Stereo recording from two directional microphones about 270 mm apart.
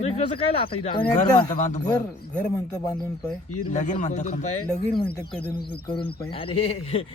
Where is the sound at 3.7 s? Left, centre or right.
Left.